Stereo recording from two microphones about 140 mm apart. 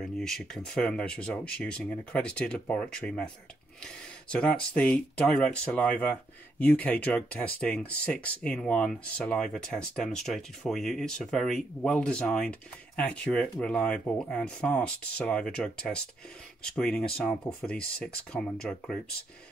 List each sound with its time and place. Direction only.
0.0 s speech: 5° left (ahead or behind)